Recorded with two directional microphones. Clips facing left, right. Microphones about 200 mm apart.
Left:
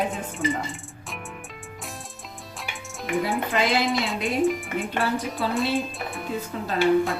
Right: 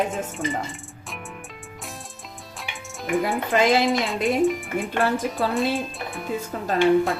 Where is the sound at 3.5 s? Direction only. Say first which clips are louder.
Right 6 dB; 45° right (ahead or behind).